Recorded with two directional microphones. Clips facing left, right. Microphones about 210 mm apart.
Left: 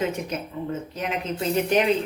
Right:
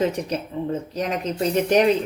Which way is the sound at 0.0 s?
35° right (ahead or behind).